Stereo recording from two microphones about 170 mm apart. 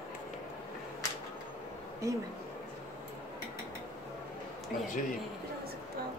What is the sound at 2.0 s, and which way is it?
Speech, 20° right (ahead or behind).